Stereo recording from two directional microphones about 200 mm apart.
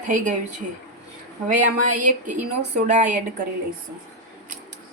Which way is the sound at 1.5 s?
40° right (ahead or behind).